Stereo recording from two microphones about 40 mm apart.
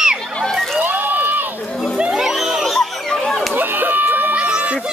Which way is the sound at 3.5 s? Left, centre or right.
Right.